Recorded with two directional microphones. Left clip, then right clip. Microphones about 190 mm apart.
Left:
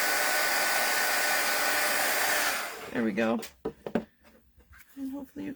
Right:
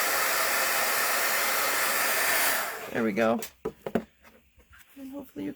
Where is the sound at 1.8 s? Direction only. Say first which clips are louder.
Right 1 dB; 30° right (ahead or behind).